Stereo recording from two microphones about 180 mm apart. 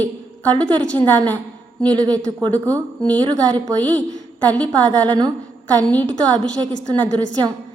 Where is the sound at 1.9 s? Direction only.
20° right (ahead or behind).